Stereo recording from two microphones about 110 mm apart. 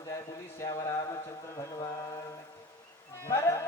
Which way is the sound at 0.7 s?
30° left (ahead or behind).